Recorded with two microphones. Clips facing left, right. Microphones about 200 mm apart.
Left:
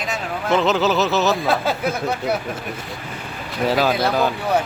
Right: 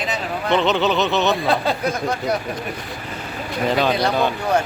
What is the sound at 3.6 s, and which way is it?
Speech, 5° left (ahead or behind).